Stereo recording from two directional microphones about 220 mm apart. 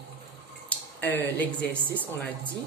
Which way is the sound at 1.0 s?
10° left (ahead or behind).